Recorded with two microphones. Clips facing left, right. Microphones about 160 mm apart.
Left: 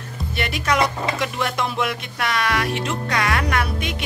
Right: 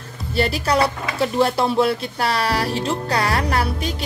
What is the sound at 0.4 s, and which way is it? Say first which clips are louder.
A woman's voice: right 3 dB; 35° right (ahead or behind).